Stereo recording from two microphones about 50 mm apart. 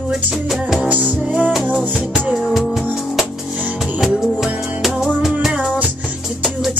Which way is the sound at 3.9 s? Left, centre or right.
Centre.